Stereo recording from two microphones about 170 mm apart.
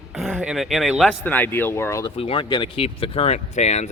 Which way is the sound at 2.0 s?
30° left (ahead or behind).